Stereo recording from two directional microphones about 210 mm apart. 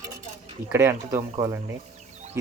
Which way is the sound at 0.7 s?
10° right (ahead or behind).